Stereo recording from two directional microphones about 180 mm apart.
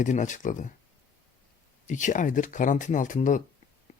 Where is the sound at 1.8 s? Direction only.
45° left (ahead or behind).